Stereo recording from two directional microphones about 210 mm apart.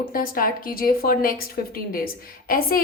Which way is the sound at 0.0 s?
45° left (ahead or behind).